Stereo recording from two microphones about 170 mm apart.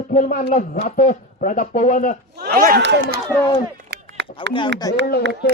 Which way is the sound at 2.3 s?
70° right (ahead or behind).